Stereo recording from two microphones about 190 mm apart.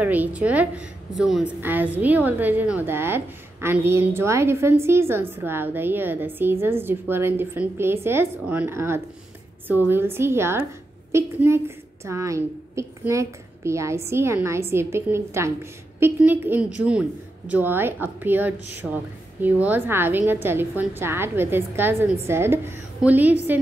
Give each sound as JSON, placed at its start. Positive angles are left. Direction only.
{"t": 0.0, "sound": "a woman's voice", "side_deg": -10}